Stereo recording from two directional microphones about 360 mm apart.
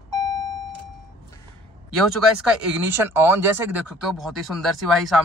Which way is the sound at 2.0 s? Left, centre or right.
Centre.